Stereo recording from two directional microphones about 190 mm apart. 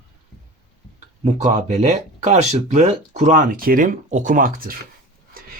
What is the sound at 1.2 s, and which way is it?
Speech, 40° right (ahead or behind).